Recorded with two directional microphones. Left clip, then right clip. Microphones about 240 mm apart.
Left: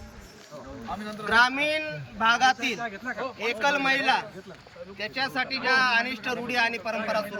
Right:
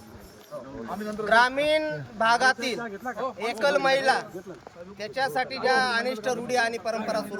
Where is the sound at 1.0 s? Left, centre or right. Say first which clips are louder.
Right 1 dB; centre.